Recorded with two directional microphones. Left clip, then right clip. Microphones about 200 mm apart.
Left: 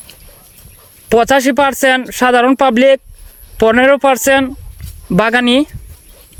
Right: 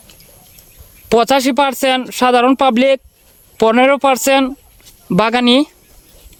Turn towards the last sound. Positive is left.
turn(degrees=-5)  # may be behind; listen again after turning